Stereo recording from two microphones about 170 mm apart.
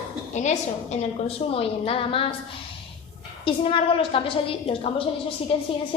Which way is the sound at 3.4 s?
30° left (ahead or behind).